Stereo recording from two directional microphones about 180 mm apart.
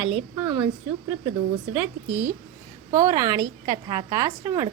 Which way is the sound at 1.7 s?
10° right (ahead or behind).